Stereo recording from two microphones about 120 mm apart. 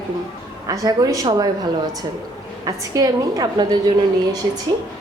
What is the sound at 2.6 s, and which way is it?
A woman's voice, 30° right (ahead or behind).